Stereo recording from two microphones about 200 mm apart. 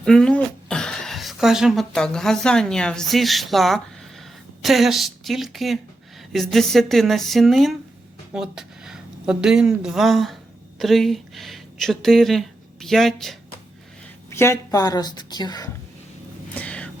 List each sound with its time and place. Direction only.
0.0 s speech: 5° left (ahead or behind)
14.3 s a woman's voice: 15° left (ahead or behind)
16.6 s a sound: 5° left (ahead or behind)